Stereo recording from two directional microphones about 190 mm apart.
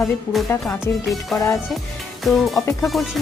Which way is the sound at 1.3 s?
Centre (ahead or behind).